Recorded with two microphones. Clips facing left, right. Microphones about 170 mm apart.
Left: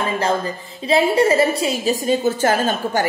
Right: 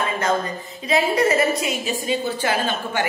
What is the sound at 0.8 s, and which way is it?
A woman's voice, 30° left (ahead or behind).